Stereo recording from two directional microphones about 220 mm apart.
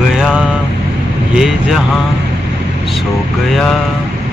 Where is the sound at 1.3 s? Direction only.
Centre (ahead or behind).